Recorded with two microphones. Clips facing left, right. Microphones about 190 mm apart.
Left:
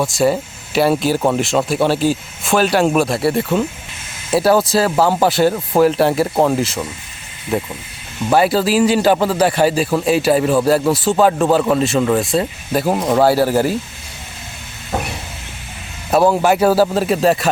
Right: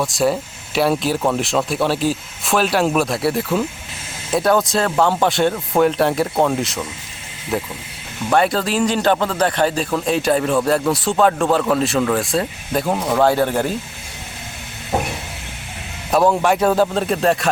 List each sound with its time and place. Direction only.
0.0 s a man's voice: centre (ahead or behind)
14.9 s a sound: 20° right (ahead or behind)
16.1 s a man's voice: 5° left (ahead or behind)